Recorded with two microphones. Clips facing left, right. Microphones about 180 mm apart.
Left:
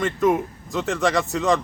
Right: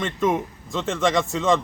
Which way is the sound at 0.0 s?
20° right (ahead or behind).